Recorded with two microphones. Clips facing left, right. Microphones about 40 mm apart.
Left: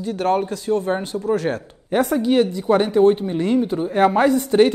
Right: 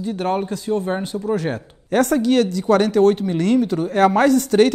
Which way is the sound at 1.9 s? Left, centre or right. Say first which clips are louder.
Right 1 dB; right.